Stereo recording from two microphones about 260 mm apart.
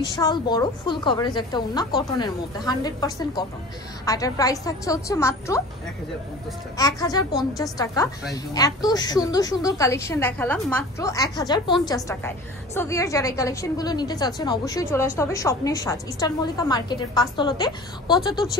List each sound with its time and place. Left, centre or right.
0.1 s a woman's voice: centre
6.8 s a woman's voice: centre